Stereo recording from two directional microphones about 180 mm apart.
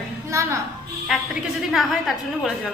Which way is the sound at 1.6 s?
Centre (ahead or behind).